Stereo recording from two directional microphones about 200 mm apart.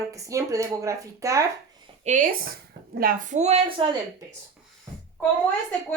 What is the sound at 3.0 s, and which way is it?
Speech, 45° right (ahead or behind).